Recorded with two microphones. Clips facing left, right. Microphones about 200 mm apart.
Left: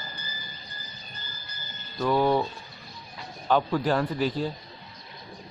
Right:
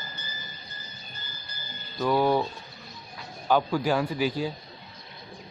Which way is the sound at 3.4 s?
5° right (ahead or behind).